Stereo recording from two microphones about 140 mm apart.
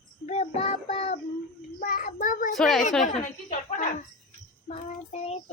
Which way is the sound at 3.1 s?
65° left (ahead or behind).